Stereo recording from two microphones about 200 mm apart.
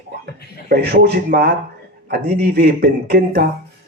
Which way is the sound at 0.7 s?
55° right (ahead or behind).